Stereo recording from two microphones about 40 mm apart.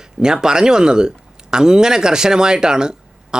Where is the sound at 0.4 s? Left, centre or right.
Centre.